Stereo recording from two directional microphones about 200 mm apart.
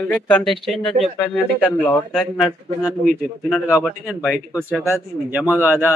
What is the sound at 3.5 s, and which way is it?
Speech, 5° right (ahead or behind).